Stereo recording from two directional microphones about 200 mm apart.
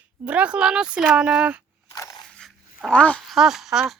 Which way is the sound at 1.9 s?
15° left (ahead or behind).